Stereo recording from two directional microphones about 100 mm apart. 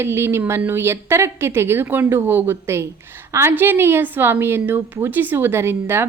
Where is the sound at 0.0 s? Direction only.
25° right (ahead or behind).